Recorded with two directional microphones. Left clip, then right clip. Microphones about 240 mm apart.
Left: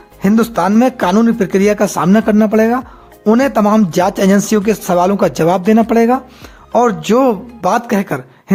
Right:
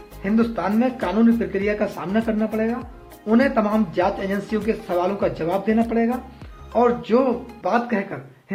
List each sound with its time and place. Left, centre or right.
0.2 s speech: left